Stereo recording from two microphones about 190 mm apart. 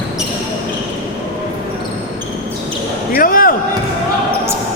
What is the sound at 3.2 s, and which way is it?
Basketball bounce, 50° left (ahead or behind).